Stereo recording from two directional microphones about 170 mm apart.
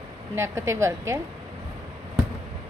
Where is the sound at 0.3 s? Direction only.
15° right (ahead or behind).